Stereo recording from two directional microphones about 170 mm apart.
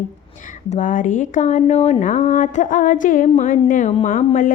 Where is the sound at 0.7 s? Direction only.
50° left (ahead or behind).